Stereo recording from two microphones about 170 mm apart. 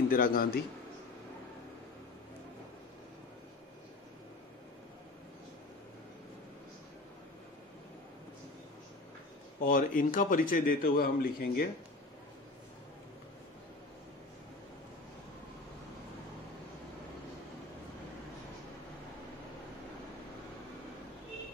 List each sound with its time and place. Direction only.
0.1 s a man's voice: 60° left (ahead or behind)
9.7 s a man's voice: 50° left (ahead or behind)